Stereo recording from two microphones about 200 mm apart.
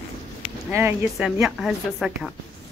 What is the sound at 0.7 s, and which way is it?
A woman's voice, 10° right (ahead or behind).